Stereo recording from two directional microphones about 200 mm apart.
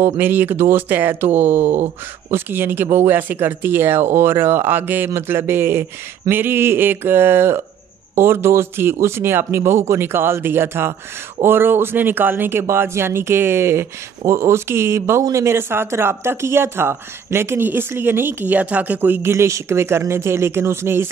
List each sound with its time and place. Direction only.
0.0 s speech: 10° right (ahead or behind)
1.6 s a sound: 35° right (ahead or behind)
2.3 s speech: 10° right (ahead or behind)